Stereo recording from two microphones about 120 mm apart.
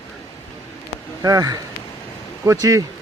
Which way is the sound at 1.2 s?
30° right (ahead or behind).